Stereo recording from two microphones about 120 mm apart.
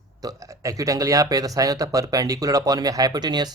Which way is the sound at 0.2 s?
30° right (ahead or behind).